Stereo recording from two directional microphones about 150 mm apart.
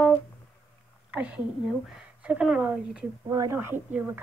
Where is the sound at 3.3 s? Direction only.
20° right (ahead or behind).